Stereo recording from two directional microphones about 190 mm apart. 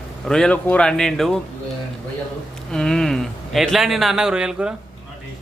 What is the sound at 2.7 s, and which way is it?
A man's voice, 5° left (ahead or behind).